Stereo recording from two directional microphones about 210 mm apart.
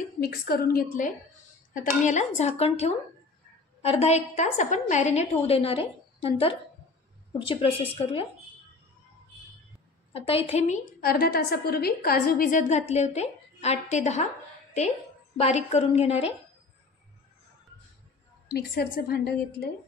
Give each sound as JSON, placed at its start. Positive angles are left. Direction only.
{"t": 0.2, "sound": "a woman's voice", "side_deg": 45}
{"t": 10.1, "sound": "speech", "side_deg": 25}
{"t": 11.0, "sound": "a woman's voice", "side_deg": 45}
{"t": 15.3, "sound": "a woman's voice", "side_deg": 30}
{"t": 18.5, "sound": "a woman's voice", "side_deg": 50}